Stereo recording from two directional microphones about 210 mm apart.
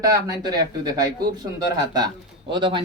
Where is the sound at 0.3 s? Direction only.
15° right (ahead or behind).